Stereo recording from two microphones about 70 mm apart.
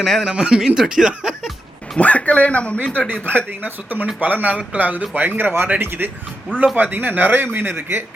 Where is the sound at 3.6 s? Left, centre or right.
Right.